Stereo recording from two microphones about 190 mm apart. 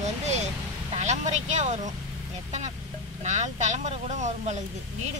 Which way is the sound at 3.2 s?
40° right (ahead or behind).